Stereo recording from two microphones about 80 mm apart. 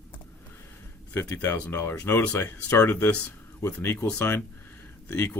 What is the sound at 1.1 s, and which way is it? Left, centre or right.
Speech, left.